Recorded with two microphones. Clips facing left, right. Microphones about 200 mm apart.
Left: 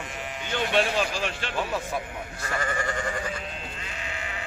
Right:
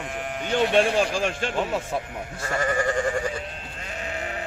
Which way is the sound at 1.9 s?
25° right (ahead or behind).